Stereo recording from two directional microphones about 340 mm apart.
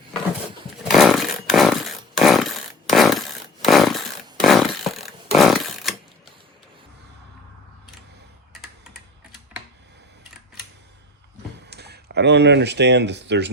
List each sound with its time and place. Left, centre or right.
0.9 s chainsaw: centre
4.4 s a sound: centre
11.7 s speech: right